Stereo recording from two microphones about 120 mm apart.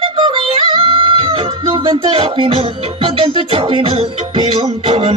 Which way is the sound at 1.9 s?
50° right (ahead or behind).